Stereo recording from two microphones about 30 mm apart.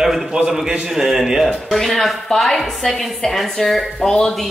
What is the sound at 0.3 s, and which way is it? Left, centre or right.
Speech, right.